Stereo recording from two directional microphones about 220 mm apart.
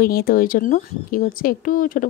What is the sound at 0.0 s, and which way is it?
Speech, 40° left (ahead or behind).